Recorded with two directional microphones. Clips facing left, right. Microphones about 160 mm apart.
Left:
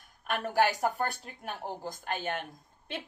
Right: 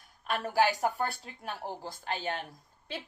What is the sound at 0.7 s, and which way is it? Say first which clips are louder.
A man's voice: even; 45° left (ahead or behind).